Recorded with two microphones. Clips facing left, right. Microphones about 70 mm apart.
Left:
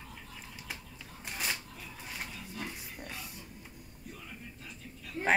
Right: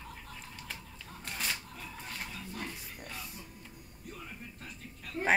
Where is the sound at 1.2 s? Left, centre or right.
Centre.